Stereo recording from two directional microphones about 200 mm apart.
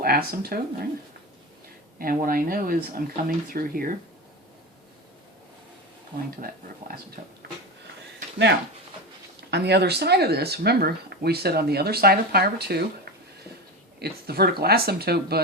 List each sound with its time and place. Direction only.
0.0 s speech: 50° right (ahead or behind)
2.0 s speech: 45° right (ahead or behind)
7.2 s speech: 40° right (ahead or behind)
9.5 s speech: 55° right (ahead or behind)
14.0 s speech: 50° right (ahead or behind)